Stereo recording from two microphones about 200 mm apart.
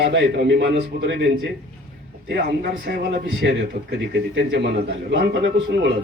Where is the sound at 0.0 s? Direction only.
60° right (ahead or behind).